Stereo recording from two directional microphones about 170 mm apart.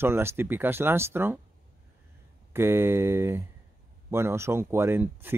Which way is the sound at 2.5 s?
15° right (ahead or behind).